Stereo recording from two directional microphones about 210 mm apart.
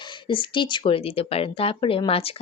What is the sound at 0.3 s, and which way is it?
Speech, 25° left (ahead or behind).